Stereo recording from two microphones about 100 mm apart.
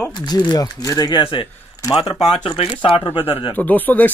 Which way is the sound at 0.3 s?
40° left (ahead or behind).